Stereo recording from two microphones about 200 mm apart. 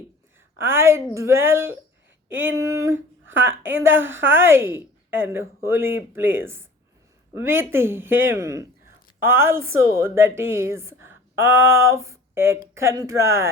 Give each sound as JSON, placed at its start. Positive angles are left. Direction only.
{"t": 0.6, "sound": "a woman's voice", "side_deg": -10}
{"t": 3.9, "sound": "a woman's voice", "side_deg": -75}
{"t": 4.3, "sound": "a woman's voice", "side_deg": -10}
{"t": 7.6, "sound": "a woman's voice", "side_deg": -10}